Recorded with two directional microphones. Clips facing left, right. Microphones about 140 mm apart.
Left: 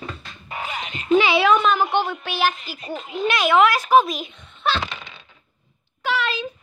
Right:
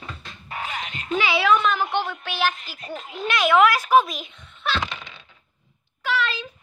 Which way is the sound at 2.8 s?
Centre (ahead or behind).